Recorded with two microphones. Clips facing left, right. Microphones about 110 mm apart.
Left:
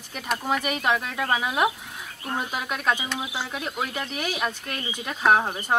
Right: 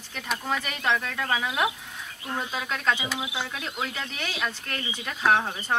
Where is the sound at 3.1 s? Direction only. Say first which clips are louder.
Left 1 dB; 20° right (ahead or behind).